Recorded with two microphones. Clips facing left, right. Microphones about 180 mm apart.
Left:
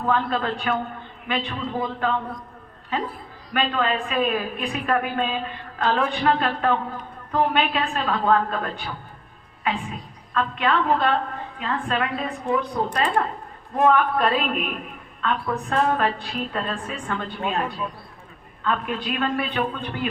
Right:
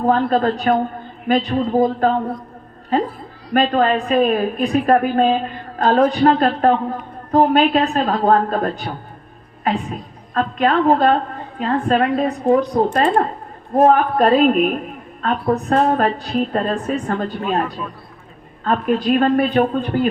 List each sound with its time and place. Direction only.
0.0 s a woman's voice: 40° right (ahead or behind)
18.6 s a woman's voice: 40° right (ahead or behind)